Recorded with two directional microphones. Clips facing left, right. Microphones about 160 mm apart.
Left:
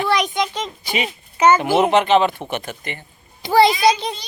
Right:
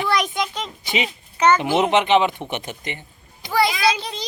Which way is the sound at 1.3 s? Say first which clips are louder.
Left 3 dB; 10° left (ahead or behind).